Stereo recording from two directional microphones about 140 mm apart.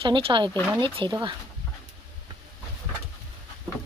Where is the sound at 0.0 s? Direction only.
35° right (ahead or behind).